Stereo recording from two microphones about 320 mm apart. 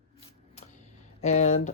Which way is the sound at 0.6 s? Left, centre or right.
Left.